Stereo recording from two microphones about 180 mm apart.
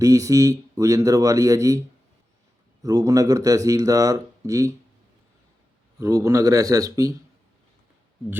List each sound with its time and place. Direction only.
0.0 s speech: 20° right (ahead or behind)
2.8 s speech: 20° right (ahead or behind)
6.0 s speech: 20° right (ahead or behind)